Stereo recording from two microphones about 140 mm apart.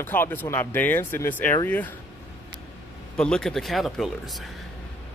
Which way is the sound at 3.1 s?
5° left (ahead or behind).